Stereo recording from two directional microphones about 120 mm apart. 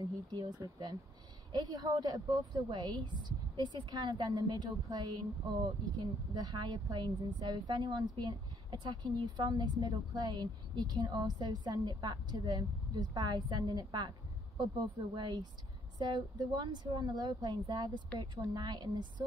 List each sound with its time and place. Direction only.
0.0 s a woman's voice: 40° right (ahead or behind)